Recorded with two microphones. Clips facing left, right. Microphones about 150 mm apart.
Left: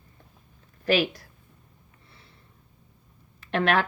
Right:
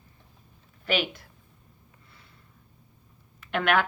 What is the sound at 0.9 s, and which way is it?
Speech, 40° left (ahead or behind).